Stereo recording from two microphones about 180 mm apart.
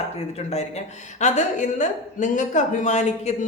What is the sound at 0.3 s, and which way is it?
Speech, 35° left (ahead or behind).